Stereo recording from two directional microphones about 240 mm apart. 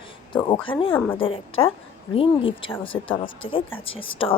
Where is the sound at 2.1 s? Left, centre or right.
Left.